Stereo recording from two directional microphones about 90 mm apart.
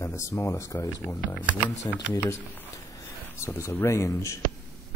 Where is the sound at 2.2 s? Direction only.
35° left (ahead or behind).